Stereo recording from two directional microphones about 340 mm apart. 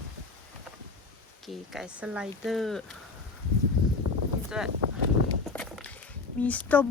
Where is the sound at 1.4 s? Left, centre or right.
Centre.